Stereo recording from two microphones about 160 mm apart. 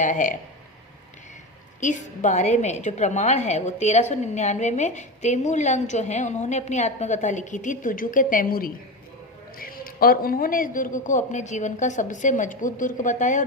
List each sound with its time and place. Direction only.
0.0 s a woman's voice: 50° left (ahead or behind)
1.8 s a woman's voice: 50° left (ahead or behind)